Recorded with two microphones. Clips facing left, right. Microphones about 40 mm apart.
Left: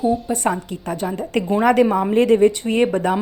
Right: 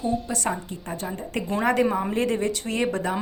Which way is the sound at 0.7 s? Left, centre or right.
Left.